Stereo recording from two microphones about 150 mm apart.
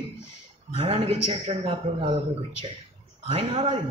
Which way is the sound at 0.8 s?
40° right (ahead or behind).